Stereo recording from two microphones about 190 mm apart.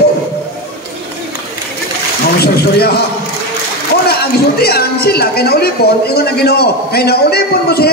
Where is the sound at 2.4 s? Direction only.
55° left (ahead or behind).